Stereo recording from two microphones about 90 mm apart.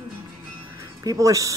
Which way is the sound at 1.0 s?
40° right (ahead or behind).